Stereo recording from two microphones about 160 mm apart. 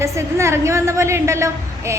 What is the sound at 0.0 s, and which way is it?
A woman's voice, 15° right (ahead or behind).